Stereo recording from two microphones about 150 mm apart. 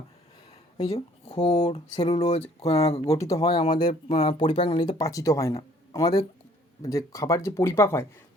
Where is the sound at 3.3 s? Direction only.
30° left (ahead or behind).